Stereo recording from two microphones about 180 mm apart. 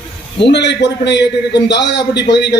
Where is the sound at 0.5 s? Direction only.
75° left (ahead or behind).